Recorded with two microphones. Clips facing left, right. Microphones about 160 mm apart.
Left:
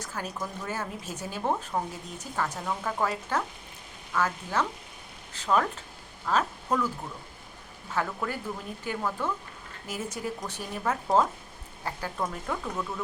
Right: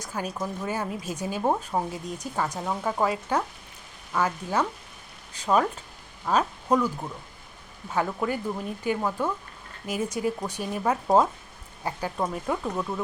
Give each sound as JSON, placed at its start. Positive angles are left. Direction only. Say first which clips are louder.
{"t": 0.0, "sound": "a woman's voice", "louder": "right 4 dB", "side_deg": -15}
{"t": 7.9, "sound": "a woman's voice", "louder": "right 4 dB", "side_deg": -15}